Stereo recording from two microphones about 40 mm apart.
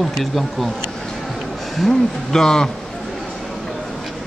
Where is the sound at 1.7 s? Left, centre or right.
Centre.